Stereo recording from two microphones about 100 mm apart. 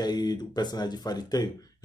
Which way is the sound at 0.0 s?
45° left (ahead or behind).